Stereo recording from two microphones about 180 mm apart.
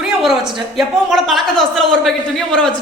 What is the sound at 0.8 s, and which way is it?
A man's voice, centre (ahead or behind).